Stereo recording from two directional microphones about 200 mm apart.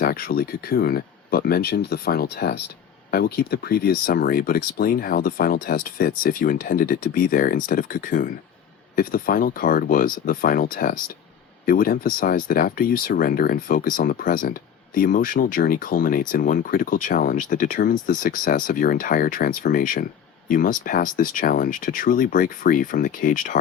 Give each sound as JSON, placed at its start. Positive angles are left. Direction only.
{"t": 0.0, "sound": "speech", "side_deg": 50}